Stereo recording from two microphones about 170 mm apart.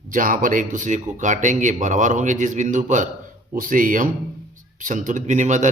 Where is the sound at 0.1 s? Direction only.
50° right (ahead or behind).